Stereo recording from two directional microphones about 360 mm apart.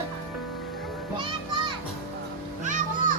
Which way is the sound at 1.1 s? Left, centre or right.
Centre.